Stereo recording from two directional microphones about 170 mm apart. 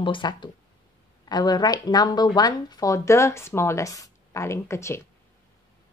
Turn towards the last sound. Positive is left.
turn(degrees=15)  # may be behind; listen again after turning